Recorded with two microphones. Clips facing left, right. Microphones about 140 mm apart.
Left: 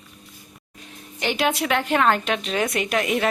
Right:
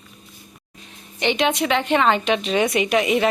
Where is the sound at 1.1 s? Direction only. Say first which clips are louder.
Right 3 dB; 5° left (ahead or behind).